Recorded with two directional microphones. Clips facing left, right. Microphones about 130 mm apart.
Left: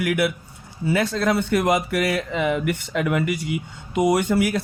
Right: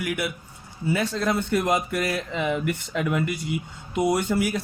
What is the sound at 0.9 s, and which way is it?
Speech, 75° left (ahead or behind).